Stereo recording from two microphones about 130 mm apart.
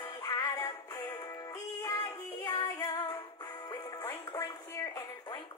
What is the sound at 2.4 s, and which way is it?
Music, 35° left (ahead or behind).